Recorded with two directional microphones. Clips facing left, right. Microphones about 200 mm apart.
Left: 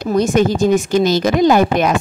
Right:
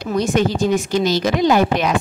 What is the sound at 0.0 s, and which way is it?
A woman's voice, 45° left (ahead or behind).